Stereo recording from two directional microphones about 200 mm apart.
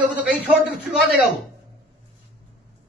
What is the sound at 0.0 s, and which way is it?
A man's voice, 5° right (ahead or behind).